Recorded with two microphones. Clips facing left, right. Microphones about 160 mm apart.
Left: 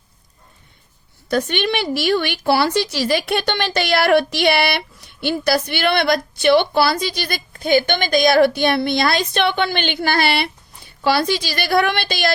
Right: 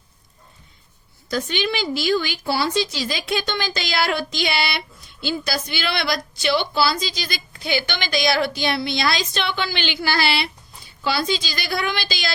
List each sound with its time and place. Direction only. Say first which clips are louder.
1.3 s a woman's voice: left 4 dB; 60° left (ahead or behind)